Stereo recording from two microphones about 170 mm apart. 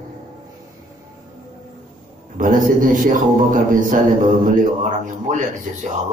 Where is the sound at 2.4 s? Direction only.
50° right (ahead or behind).